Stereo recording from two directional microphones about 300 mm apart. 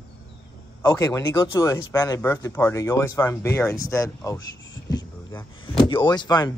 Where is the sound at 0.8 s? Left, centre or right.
Centre.